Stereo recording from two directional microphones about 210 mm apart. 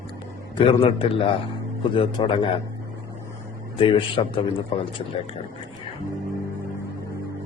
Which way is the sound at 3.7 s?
25° left (ahead or behind).